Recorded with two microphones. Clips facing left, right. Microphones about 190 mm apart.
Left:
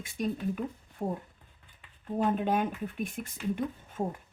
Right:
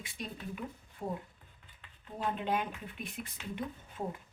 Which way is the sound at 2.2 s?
45° left (ahead or behind).